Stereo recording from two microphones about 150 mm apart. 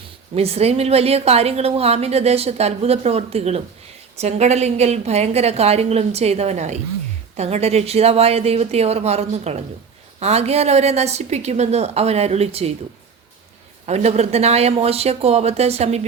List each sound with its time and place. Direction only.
0.3 s a woman's voice: 45° right (ahead or behind)
13.8 s a woman's voice: 45° right (ahead or behind)